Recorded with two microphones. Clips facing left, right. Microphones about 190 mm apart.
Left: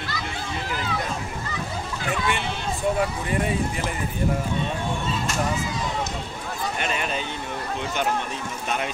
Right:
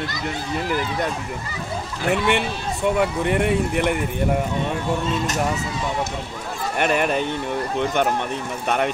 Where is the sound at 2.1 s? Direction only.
65° right (ahead or behind).